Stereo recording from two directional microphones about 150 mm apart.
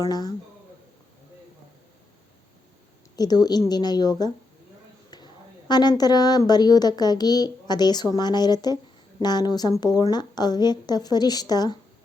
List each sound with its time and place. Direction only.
0.0 s a woman's voice: 25° left (ahead or behind)
3.2 s a woman's voice: 25° left (ahead or behind)